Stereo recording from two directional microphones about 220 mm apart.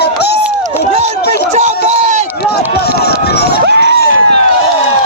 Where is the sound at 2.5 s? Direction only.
45° left (ahead or behind).